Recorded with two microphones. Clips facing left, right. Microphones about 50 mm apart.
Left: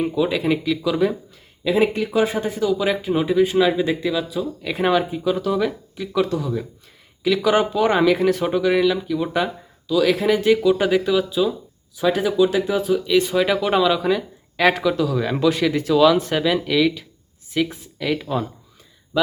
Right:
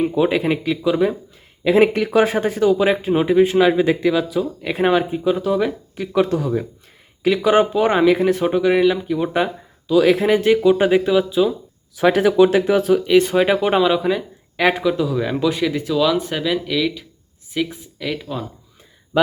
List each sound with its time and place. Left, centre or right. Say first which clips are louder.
0.1 s speech: right 2 dB; right
1.6 s speech: right 4 dB; right; by 5.7 s centre
6.2 s speech: right 4 dB; right
7.3 s speech: right 3 dB; right
12.0 s speech: right 4 dB; right
13.3 s speech: right 2 dB; right; by 18.4 s centre